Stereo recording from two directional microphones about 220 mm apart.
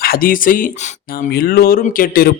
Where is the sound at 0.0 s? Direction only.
40° left (ahead or behind).